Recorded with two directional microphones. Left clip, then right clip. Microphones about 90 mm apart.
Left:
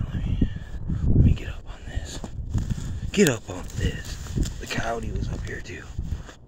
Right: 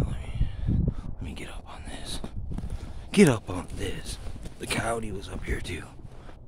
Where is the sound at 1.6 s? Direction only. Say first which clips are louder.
Right 1 dB; 70° right (ahead or behind).